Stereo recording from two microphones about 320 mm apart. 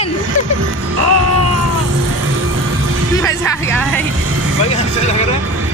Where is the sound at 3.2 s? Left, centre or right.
Centre.